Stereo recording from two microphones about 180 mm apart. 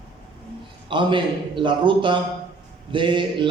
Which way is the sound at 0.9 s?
25° right (ahead or behind).